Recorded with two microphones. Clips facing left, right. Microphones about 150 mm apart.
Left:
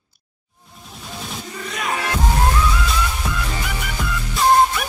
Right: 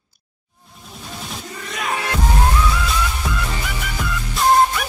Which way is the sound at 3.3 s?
Centre (ahead or behind).